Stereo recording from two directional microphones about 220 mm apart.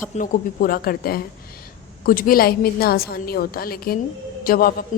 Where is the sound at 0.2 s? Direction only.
40° left (ahead or behind).